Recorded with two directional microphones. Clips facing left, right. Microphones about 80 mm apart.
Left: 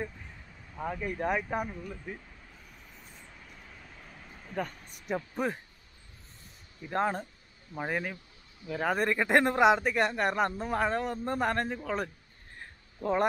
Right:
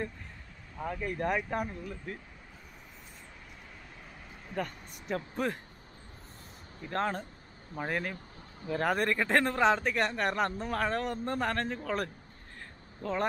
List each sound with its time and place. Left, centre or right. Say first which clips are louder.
0.7 s speech: left 1 dB; centre
4.1 s a sound: even; centre
5.4 s speech: left 1 dB; centre
6.9 s speech: left 2 dB; centre
9.2 s speech: left 4 dB; centre
13.0 s speech: left 4 dB; centre